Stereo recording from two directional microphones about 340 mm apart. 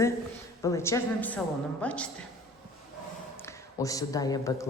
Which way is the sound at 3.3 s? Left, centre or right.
Centre.